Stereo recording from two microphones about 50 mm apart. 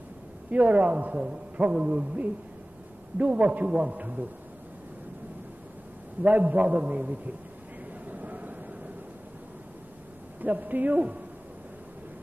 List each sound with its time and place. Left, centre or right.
0.5 s a man's voice: right
6.2 s a man's voice: right
8.1 s vehicle: right
10.4 s a man's voice: right